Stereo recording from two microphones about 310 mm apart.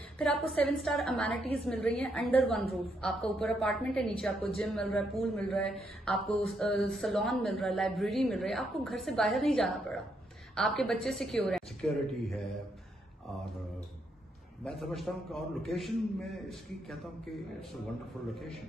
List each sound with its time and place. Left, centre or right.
0.2 s speech: centre
14.6 s speech: centre